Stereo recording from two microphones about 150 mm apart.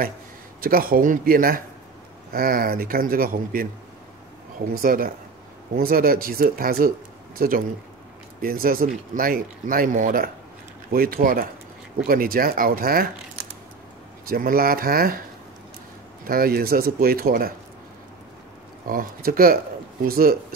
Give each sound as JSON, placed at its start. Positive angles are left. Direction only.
{"t": 0.6, "sound": "speech", "side_deg": -75}
{"t": 4.7, "sound": "speech", "side_deg": -75}
{"t": 14.3, "sound": "speech", "side_deg": -80}
{"t": 16.3, "sound": "speech", "side_deg": -80}
{"t": 18.9, "sound": "speech", "side_deg": -75}